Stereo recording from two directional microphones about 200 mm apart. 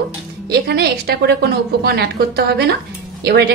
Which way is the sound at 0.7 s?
50° right (ahead or behind).